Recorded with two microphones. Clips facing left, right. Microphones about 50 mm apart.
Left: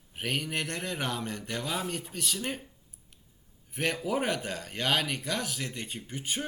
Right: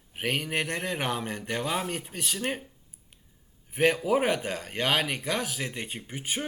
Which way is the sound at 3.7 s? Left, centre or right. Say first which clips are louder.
Right 6 dB; centre.